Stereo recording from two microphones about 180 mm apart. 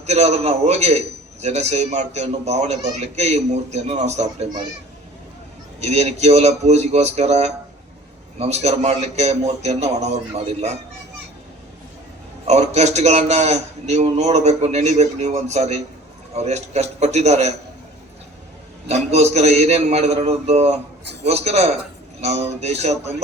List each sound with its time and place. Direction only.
0.0 s a man's voice: 35° right (ahead or behind)
5.8 s a man's voice: 35° right (ahead or behind)
12.5 s a man's voice: 40° right (ahead or behind)
18.9 s a man's voice: 35° right (ahead or behind)